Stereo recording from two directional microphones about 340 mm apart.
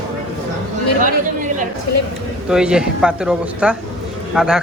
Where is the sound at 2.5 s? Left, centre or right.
Centre.